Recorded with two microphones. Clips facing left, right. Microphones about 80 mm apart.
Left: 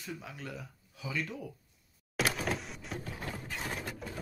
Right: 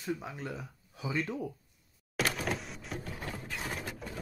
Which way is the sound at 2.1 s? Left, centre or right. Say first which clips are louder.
Even; centre.